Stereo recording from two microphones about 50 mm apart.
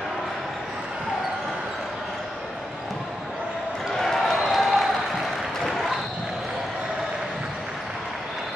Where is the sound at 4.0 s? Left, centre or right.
Centre.